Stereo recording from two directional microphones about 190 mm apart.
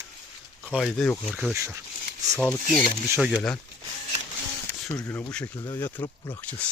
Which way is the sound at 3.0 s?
10° right (ahead or behind).